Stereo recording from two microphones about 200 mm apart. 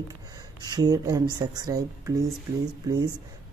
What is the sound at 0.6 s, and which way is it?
A woman's voice, 20° right (ahead or behind).